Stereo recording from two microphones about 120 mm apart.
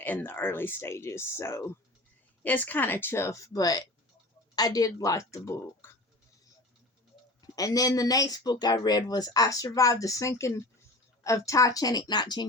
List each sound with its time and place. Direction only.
0.0 s speech: 15° left (ahead or behind)
7.4 s speech: 30° left (ahead or behind)